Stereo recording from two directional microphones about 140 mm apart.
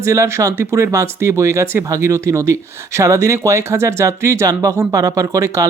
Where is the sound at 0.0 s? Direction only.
20° right (ahead or behind).